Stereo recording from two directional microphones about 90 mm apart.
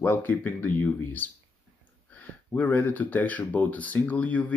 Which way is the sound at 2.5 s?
20° left (ahead or behind).